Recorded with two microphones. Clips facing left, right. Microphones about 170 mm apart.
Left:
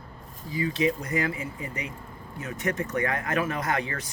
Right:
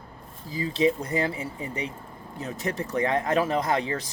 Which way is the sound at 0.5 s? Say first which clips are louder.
Right 2 dB; 35° right (ahead or behind).